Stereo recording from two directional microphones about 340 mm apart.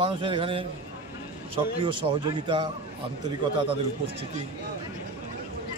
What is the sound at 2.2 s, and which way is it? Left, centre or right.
Speech, centre.